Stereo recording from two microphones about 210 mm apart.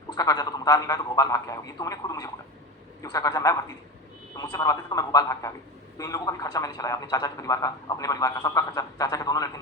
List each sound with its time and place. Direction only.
0.1 s a man's voice: 20° left (ahead or behind)